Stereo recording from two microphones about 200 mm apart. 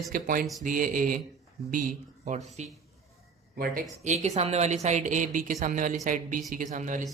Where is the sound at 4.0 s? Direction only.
35° right (ahead or behind).